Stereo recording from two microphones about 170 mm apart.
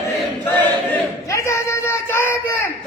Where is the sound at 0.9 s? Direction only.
15° left (ahead or behind).